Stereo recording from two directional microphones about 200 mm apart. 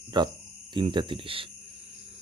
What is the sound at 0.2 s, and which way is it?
Speech, 25° right (ahead or behind).